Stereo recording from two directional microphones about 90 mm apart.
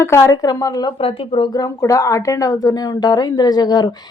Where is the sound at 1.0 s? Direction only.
90° left.